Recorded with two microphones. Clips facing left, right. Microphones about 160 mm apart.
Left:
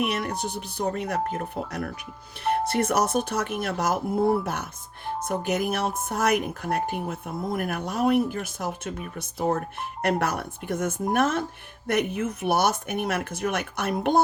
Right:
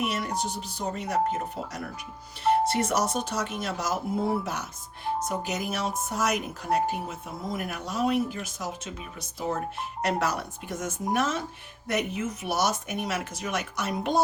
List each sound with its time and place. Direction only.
0.0 s speech: 60° left (ahead or behind)